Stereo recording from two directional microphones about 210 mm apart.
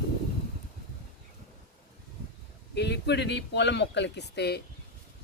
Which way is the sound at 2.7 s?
55° left (ahead or behind).